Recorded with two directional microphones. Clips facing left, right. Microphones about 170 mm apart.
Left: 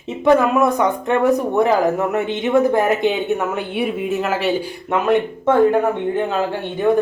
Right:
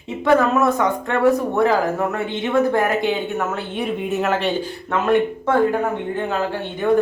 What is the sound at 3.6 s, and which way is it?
Speech, 10° left (ahead or behind).